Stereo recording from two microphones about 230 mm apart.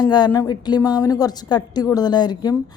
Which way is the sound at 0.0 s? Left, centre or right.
Centre.